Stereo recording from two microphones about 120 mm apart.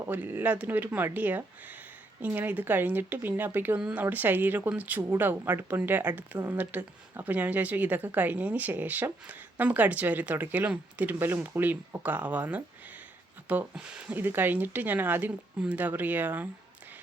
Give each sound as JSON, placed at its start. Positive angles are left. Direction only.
{"t": 0.0, "sound": "speech", "side_deg": -15}